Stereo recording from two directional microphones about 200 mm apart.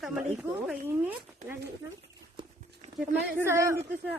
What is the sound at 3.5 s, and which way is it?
Speech, 15° right (ahead or behind).